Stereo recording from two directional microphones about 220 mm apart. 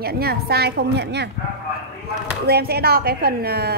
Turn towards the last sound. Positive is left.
turn(degrees=-45)  # may be behind; listen again after turning